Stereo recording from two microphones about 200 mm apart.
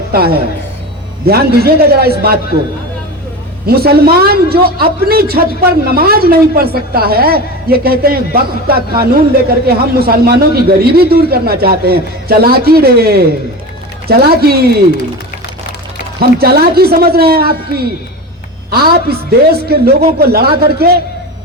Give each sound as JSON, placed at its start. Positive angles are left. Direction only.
{"t": 0.1, "sound": "a man's voice", "side_deg": -50}
{"t": 3.7, "sound": "a man's voice", "side_deg": -50}
{"t": 16.4, "sound": "a man's voice", "side_deg": -50}